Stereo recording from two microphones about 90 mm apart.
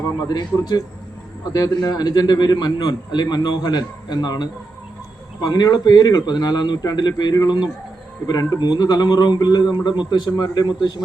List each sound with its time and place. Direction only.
0.3 s a man's voice: 50° left (ahead or behind)